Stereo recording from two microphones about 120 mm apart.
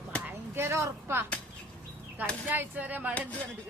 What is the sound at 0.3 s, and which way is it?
Speech, 20° right (ahead or behind).